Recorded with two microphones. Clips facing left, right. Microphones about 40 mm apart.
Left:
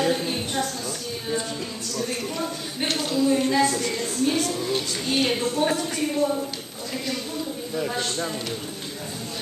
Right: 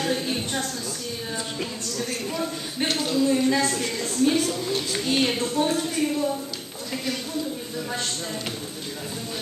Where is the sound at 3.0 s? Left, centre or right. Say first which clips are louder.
Even; centre.